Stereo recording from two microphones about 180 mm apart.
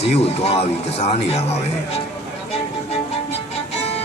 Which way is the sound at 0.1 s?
35° left (ahead or behind).